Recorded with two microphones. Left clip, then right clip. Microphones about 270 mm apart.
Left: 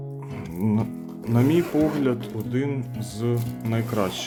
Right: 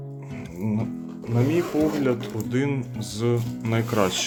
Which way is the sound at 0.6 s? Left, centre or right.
Left.